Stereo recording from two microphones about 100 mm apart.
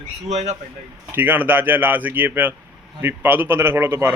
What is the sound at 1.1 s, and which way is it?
Speech, 20° right (ahead or behind).